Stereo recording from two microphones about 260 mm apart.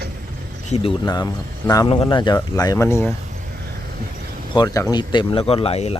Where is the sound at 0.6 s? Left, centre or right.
Left.